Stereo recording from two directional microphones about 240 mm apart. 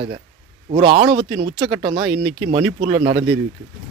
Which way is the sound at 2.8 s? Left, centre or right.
Centre.